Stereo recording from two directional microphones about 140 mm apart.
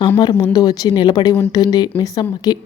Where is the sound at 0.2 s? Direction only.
30° left (ahead or behind).